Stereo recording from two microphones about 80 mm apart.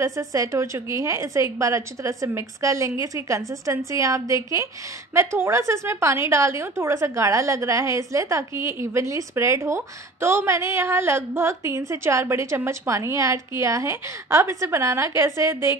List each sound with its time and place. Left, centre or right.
0.0 s a woman's voice: right